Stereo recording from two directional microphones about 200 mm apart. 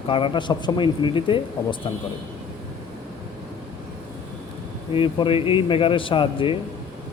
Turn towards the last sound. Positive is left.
turn(degrees=25)  # may be behind; listen again after turning